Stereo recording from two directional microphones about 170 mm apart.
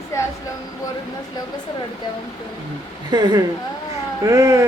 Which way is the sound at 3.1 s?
25° right (ahead or behind).